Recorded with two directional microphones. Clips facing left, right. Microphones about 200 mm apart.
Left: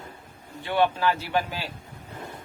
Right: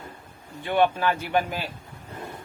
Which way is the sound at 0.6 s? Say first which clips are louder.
Right 1 dB; 15° right (ahead or behind).